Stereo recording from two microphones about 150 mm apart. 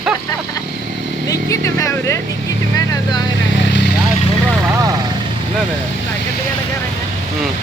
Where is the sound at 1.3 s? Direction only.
20° left (ahead or behind).